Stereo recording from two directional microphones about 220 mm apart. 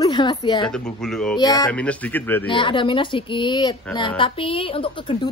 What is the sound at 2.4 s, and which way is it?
A woman's voice, 20° left (ahead or behind).